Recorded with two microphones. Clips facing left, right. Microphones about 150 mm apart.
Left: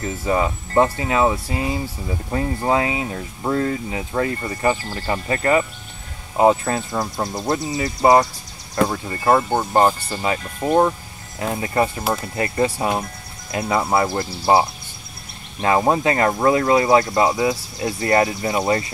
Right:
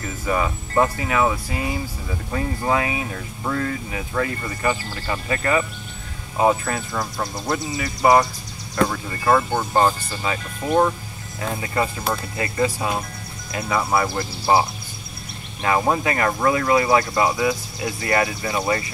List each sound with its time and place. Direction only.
0.0 s speech: 25° left (ahead or behind)